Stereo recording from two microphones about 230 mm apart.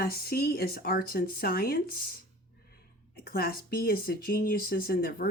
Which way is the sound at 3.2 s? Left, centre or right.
Left.